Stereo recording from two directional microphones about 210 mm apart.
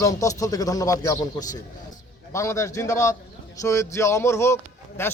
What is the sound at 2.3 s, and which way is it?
Speech, 15° left (ahead or behind).